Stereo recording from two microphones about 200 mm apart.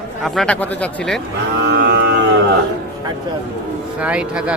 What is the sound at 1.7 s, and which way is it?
Cattle, 55° right (ahead or behind).